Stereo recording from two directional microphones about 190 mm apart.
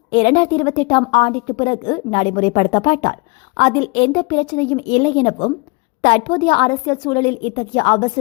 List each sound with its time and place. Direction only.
0.1 s a woman's voice: 30° left (ahead or behind)